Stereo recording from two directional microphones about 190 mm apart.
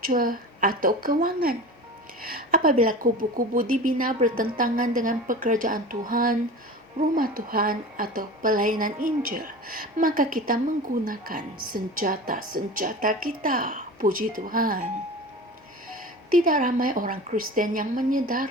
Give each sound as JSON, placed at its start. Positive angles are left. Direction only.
{"t": 0.0, "sound": "a woman's voice", "side_deg": -45}
{"t": 16.3, "sound": "a woman's voice", "side_deg": -45}